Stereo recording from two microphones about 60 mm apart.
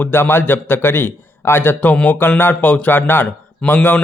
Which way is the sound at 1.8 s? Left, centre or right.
Left.